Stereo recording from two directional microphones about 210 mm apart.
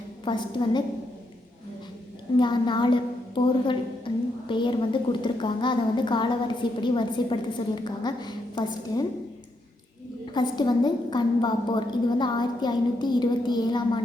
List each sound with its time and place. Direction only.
0.3 s a woman's voice: 20° left (ahead or behind)
2.4 s a woman's voice: 20° left (ahead or behind)
10.3 s a woman's voice: 20° left (ahead or behind)